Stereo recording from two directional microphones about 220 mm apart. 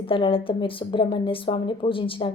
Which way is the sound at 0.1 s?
25° left (ahead or behind).